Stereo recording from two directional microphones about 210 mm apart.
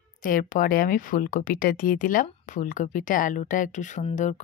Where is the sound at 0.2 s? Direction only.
40° left (ahead or behind).